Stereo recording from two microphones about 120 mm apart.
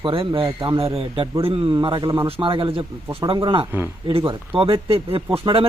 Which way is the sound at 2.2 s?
50° right (ahead or behind).